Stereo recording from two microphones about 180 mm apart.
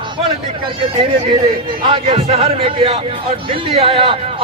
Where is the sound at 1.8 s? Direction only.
30° right (ahead or behind).